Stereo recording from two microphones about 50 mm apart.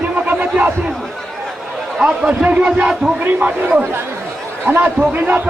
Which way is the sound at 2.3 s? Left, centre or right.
Right.